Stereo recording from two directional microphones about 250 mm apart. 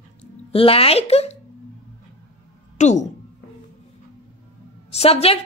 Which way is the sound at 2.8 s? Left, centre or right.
Left.